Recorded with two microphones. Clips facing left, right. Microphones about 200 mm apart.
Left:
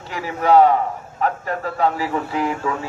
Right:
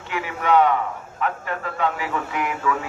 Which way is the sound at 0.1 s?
35° left (ahead or behind).